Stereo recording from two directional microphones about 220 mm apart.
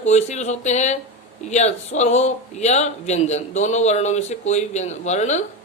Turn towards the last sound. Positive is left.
turn(degrees=30)  # may be behind; listen again after turning